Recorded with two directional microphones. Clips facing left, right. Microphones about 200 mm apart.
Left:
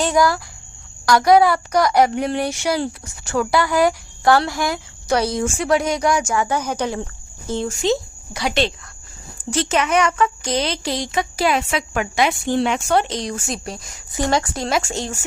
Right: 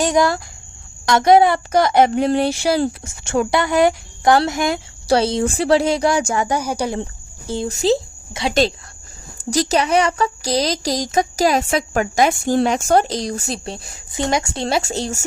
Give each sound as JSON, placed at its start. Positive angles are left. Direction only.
{"t": 0.0, "sound": "a child's voice", "side_deg": -20}
{"t": 6.5, "sound": "speech", "side_deg": -10}
{"t": 7.7, "sound": "speech", "side_deg": -35}
{"t": 9.4, "sound": "a woman's voice", "side_deg": -40}
{"t": 14.5, "sound": "a woman's voice", "side_deg": -30}